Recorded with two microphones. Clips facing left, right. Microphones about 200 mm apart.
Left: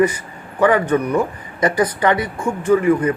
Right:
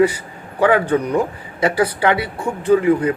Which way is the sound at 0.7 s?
15° right (ahead or behind).